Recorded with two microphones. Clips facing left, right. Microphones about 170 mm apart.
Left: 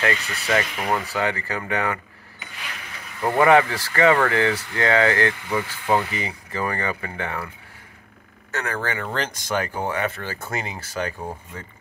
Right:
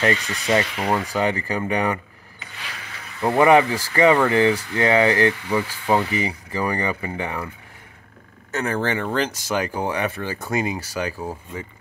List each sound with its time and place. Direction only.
0.0 s speech: 25° right (ahead or behind)
3.2 s speech: 20° right (ahead or behind)
8.5 s speech: 25° right (ahead or behind)
9.0 s speech: 10° right (ahead or behind)